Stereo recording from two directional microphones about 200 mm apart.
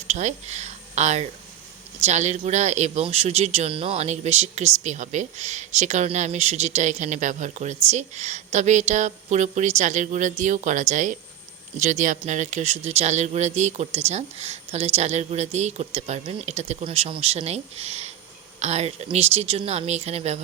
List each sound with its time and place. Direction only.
0.1 s speech: 35° right (ahead or behind)